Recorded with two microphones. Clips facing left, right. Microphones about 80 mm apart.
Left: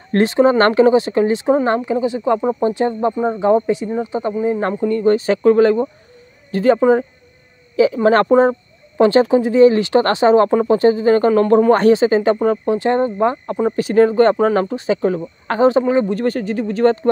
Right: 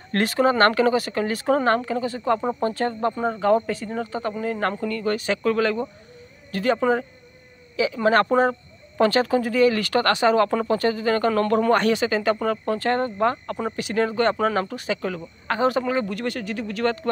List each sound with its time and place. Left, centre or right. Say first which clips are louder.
0.1 s speech: left 7 dB; left
13.7 s speech: left 11 dB; left